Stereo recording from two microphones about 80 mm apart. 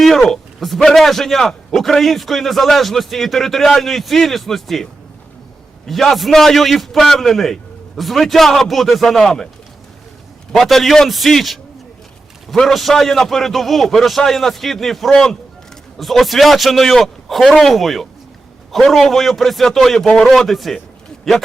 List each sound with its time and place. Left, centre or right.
0.0 s a man's voice: centre
10.5 s a man's voice: centre